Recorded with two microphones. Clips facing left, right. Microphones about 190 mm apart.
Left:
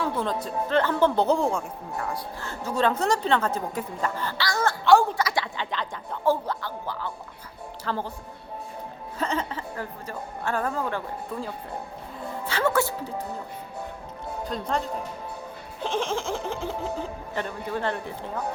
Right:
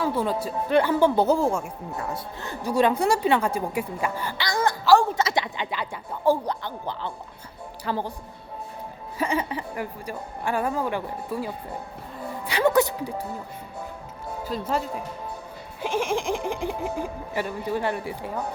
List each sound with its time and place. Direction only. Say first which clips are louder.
0.0 s a woman's voice: right 2 dB; 10° right (ahead or behind)
2.0 s a woman's voice: left 1 dB; 20° right (ahead or behind)
9.1 s a woman's voice: right 3 dB; 10° right (ahead or behind)
14.4 s a man's voice: right 2 dB; 5° right (ahead or behind)